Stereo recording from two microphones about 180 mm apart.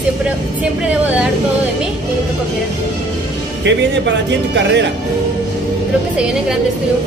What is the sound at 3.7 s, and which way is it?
Speech, 80° right.